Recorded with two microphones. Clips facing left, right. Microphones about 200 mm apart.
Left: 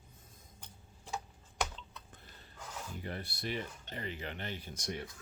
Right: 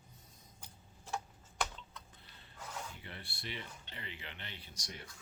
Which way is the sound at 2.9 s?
45° left (ahead or behind).